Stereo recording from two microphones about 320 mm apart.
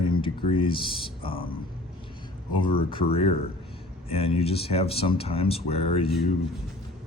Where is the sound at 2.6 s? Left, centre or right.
Centre.